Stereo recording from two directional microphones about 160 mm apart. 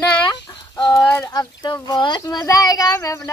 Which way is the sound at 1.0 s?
10° left (ahead or behind).